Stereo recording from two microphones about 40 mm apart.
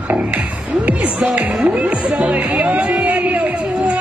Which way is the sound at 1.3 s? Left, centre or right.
Right.